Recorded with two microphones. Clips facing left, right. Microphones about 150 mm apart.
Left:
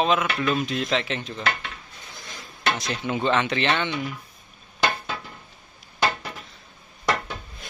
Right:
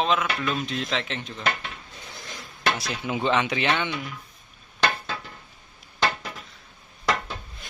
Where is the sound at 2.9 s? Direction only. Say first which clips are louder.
Left 2 dB; 10° right (ahead or behind).